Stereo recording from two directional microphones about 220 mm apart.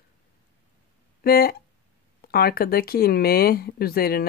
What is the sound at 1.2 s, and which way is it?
Speech, 45° left (ahead or behind).